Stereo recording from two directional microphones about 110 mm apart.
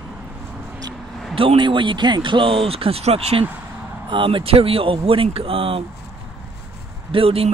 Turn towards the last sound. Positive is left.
turn(degrees=-60)  # may be behind; listen again after turning